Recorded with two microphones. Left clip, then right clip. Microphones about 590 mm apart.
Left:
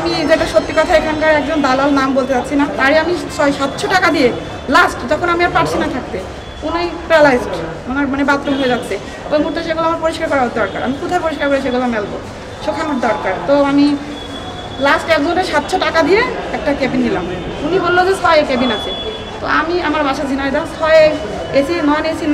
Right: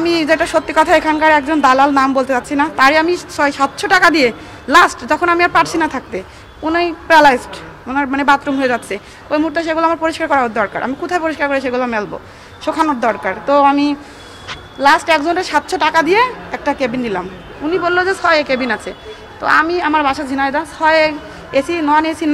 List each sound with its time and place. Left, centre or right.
0.1 s speech: right